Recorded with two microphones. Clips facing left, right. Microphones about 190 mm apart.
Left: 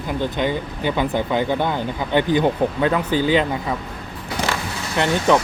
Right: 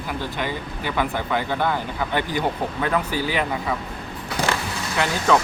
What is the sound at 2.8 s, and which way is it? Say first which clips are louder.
Speech: left 3 dB; 20° left (ahead or behind).